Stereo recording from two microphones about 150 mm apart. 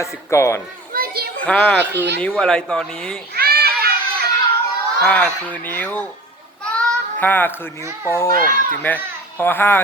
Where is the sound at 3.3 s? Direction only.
90° right.